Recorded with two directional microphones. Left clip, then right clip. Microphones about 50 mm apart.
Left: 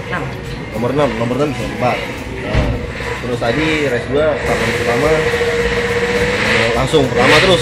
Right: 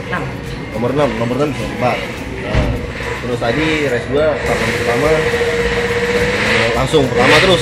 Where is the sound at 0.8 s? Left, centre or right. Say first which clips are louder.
Even; left.